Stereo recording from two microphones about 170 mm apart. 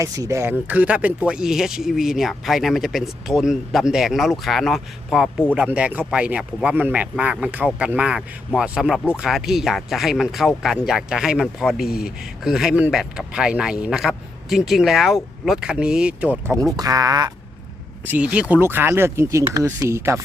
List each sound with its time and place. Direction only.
0.0 s speech: 20° right (ahead or behind)
16.7 s speech: 20° right (ahead or behind)
18.0 s speech: 10° right (ahead or behind)